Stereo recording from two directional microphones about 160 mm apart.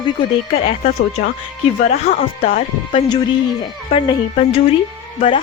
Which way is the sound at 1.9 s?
65° left (ahead or behind).